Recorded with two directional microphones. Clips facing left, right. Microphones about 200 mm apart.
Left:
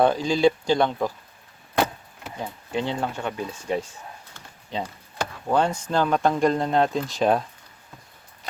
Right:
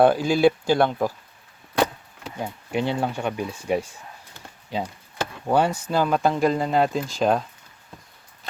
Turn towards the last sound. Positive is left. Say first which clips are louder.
# even
turn(degrees=0)  # may be behind; listen again after turning